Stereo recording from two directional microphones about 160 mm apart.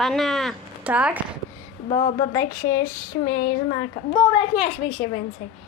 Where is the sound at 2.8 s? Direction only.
55° left (ahead or behind).